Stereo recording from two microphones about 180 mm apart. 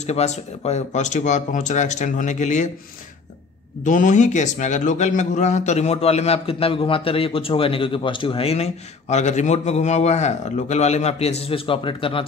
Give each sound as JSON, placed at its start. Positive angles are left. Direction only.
{"t": 0.0, "sound": "a man's voice", "side_deg": 35}
{"t": 3.8, "sound": "a man's voice", "side_deg": 45}